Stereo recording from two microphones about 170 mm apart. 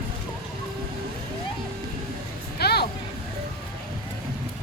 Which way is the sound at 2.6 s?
70° left (ahead or behind).